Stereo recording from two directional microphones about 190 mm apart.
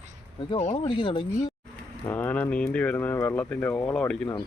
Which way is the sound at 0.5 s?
30° left (ahead or behind).